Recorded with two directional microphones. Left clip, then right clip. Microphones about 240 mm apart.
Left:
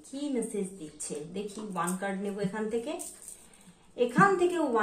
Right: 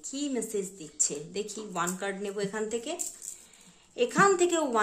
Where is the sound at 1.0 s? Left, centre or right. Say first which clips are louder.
Right 5 dB; right.